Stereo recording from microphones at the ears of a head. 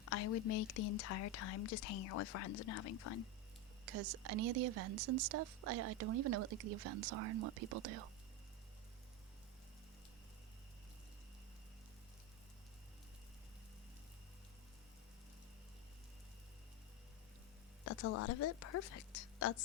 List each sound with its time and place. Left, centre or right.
0.0 s speech: left
3.8 s a woman's voice: right
17.8 s speech: left